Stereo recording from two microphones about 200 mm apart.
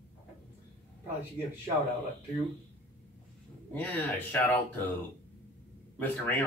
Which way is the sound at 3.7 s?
10° left (ahead or behind).